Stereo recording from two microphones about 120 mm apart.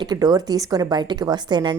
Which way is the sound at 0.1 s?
35° right (ahead or behind).